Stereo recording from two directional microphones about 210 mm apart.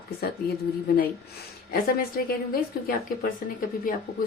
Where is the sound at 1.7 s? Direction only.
45° left (ahead or behind).